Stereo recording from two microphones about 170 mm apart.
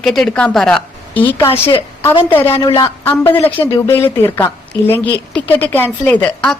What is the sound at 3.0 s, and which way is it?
A woman's voice, 10° left (ahead or behind).